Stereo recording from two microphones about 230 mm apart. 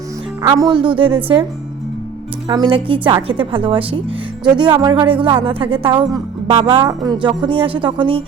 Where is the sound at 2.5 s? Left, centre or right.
Right.